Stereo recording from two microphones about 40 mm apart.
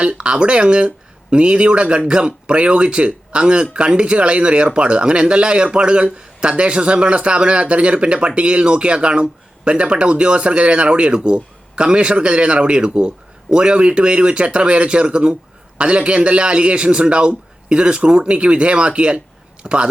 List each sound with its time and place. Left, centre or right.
0.0 s speech: right